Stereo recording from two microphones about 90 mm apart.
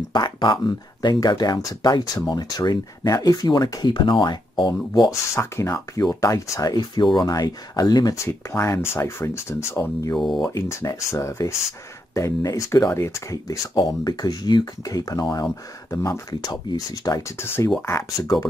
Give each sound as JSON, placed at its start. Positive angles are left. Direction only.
{"t": 0.1, "sound": "speech", "side_deg": 55}
{"t": 5.3, "sound": "speech", "side_deg": 35}
{"t": 8.2, "sound": "speech", "side_deg": 30}
{"t": 10.1, "sound": "speech", "side_deg": 0}
{"t": 10.4, "sound": "speech", "side_deg": 35}